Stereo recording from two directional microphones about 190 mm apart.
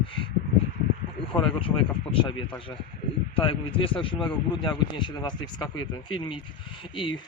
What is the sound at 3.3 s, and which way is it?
Speech, 30° left (ahead or behind).